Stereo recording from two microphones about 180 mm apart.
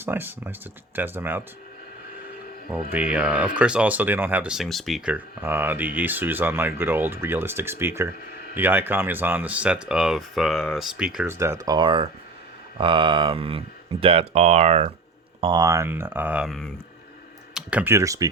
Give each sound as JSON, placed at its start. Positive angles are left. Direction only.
{"t": 0.0, "sound": "speech", "side_deg": -10}
{"t": 2.9, "sound": "speech", "side_deg": -10}
{"t": 11.3, "sound": "speech", "side_deg": -15}
{"t": 15.4, "sound": "speech", "side_deg": -25}